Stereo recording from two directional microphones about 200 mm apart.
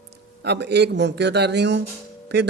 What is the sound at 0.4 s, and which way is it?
A man's voice, 55° right (ahead or behind).